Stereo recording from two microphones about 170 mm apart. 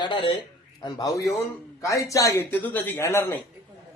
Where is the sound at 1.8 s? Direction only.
20° left (ahead or behind).